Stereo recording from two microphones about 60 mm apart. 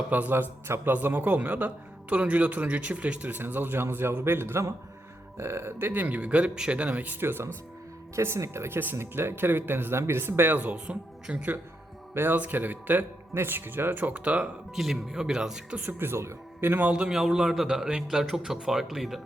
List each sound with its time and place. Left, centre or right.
0.1 s speech: right
6.5 s speech: centre
6.7 s speech: right
7.2 s speech: right
8.1 s speech: right
10.5 s speech: right
11.3 s speech: centre
12.1 s speech: right
14.8 s speech: centre
15.7 s speech: right
16.6 s speech: right
16.9 s speech: centre